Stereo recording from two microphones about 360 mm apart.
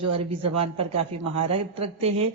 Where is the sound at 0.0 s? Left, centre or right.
Right.